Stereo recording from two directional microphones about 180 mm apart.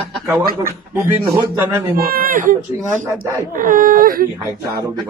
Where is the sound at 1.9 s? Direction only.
55° right (ahead or behind).